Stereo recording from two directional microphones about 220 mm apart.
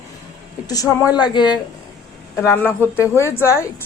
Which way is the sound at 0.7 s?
15° left (ahead or behind).